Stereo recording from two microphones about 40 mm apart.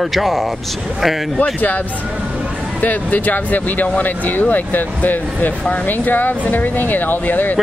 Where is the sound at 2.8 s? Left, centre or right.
Left.